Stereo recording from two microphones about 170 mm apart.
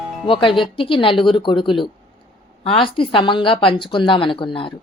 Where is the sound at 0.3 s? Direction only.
30° left (ahead or behind).